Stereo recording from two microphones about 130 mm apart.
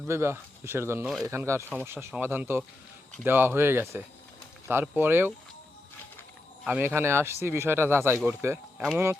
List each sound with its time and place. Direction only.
0.0 s speech: 20° right (ahead or behind)
6.7 s speech: 15° right (ahead or behind)